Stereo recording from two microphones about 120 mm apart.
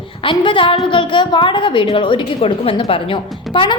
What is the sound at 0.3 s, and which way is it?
A woman's voice, 45° left (ahead or behind).